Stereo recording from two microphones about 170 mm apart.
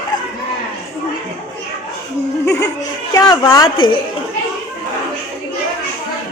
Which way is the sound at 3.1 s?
20° left (ahead or behind).